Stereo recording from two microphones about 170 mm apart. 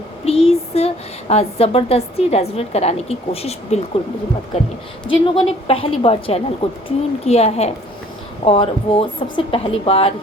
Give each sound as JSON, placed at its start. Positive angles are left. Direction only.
{"t": 0.3, "sound": "a sound", "side_deg": 35}
{"t": 1.3, "sound": "a woman's voice", "side_deg": 35}
{"t": 5.2, "sound": "a woman's voice", "side_deg": 30}